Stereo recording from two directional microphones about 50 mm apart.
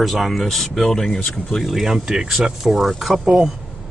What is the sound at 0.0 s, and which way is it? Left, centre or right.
Speech, centre.